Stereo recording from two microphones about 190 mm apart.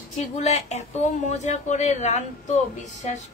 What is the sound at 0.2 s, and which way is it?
Speech, 35° left (ahead or behind).